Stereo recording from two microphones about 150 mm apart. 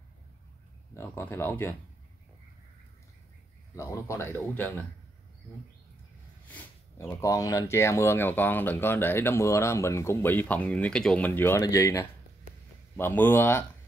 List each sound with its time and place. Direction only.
0.9 s speech: 15° left (ahead or behind)
3.7 s speech: 20° left (ahead or behind)
6.5 s speech: 15° left (ahead or behind)